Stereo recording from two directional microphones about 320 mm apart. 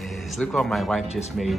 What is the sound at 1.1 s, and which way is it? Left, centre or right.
Speech, centre.